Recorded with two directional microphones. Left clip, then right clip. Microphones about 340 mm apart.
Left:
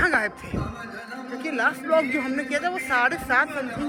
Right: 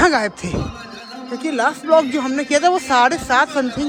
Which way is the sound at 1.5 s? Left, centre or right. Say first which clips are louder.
Right 7 dB; centre.